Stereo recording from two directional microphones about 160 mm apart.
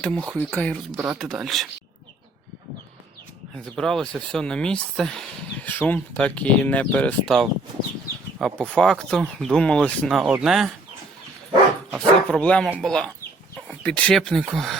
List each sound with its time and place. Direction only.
0.3 s speech: 10° left (ahead or behind)
0.9 s speech: 5° right (ahead or behind)
3.8 s speech: 5° left (ahead or behind)
10.2 s speech: 5° right (ahead or behind)
11.9 s speech: 5° left (ahead or behind)